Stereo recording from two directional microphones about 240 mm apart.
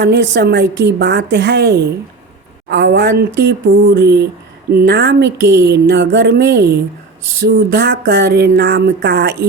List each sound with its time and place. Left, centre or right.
0.0 s speech: right